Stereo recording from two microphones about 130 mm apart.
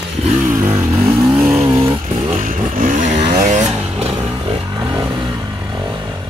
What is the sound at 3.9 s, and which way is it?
Vehicle, 45° right (ahead or behind).